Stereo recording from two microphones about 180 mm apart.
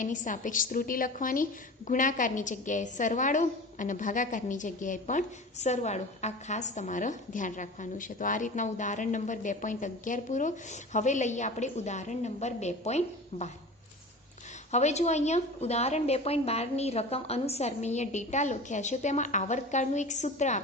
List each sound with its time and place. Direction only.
0.0 s a woman's voice: 45° left (ahead or behind)
14.7 s a woman's voice: 40° left (ahead or behind)